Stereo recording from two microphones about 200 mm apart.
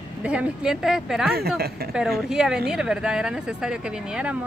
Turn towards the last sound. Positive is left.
turn(degrees=-5)  # may be behind; listen again after turning